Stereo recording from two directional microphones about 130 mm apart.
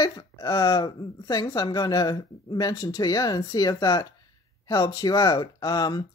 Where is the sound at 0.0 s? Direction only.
25° left (ahead or behind).